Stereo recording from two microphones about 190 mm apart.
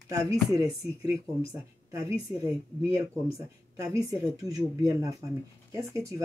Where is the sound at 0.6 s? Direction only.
15° right (ahead or behind).